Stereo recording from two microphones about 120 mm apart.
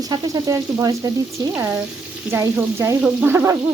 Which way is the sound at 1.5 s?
20° right (ahead or behind).